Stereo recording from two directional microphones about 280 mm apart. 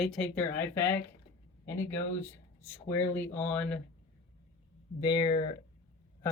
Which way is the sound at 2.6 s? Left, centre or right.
Centre.